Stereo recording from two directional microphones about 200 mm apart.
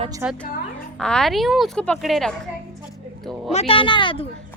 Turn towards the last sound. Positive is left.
turn(degrees=25)  # may be behind; listen again after turning